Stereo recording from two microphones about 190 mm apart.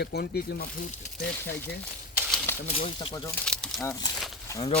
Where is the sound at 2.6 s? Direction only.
30° left (ahead or behind).